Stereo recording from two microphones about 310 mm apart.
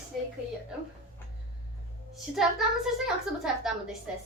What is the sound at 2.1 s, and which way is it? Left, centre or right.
Speech, centre.